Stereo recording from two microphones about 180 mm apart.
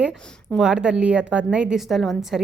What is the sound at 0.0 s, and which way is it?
A woman's voice, 5° right (ahead or behind).